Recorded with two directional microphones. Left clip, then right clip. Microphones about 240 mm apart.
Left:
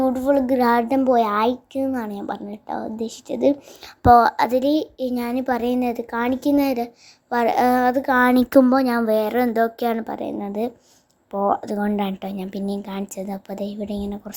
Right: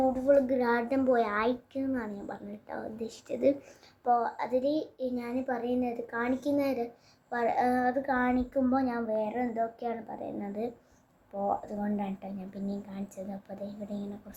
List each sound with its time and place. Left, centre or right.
0.0 s speech: left
4.0 s a child's voice: left